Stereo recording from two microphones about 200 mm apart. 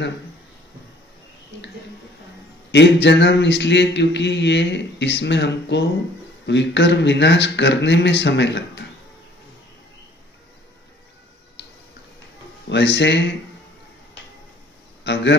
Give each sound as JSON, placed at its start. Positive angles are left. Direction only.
{"t": 2.7, "sound": "a man's voice", "side_deg": 60}
{"t": 11.6, "sound": "a sound", "side_deg": 60}
{"t": 12.6, "sound": "a man's voice", "side_deg": 60}
{"t": 15.1, "sound": "a man's voice", "side_deg": 60}